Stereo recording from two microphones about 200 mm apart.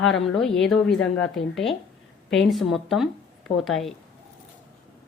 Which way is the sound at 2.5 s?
Centre (ahead or behind).